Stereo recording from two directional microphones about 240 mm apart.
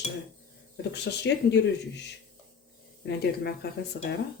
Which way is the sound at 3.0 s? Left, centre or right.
Left.